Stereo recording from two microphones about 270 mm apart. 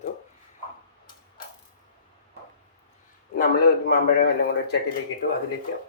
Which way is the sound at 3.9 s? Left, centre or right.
Left.